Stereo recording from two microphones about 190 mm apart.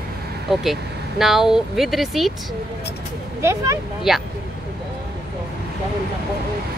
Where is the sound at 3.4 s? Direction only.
15° right (ahead or behind).